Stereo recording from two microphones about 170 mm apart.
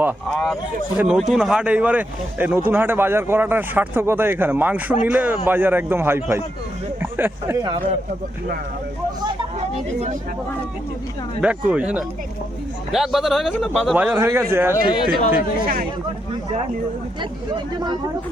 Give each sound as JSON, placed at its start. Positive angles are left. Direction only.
{"t": 0.3, "sound": "speech", "side_deg": 5}
{"t": 0.9, "sound": "a man's voice", "side_deg": -5}
{"t": 11.3, "sound": "a man's voice", "side_deg": -5}
{"t": 14.2, "sound": "speech", "side_deg": -15}
{"t": 14.8, "sound": "speech", "side_deg": 30}
{"t": 15.6, "sound": "speech", "side_deg": -55}